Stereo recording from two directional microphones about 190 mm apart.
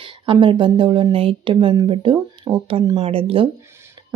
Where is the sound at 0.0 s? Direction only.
25° right (ahead or behind).